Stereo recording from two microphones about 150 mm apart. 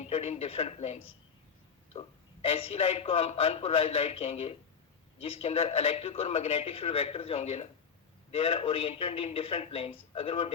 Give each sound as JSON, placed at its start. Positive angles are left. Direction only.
{"t": 0.0, "sound": "speech", "side_deg": 45}